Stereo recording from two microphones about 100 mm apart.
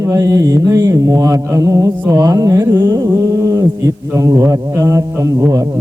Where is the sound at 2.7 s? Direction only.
50° right (ahead or behind).